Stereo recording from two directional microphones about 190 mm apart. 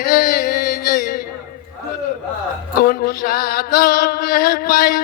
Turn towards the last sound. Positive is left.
turn(degrees=50)  # may be behind; listen again after turning